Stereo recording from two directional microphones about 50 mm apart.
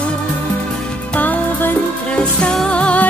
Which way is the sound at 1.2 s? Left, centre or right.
Left.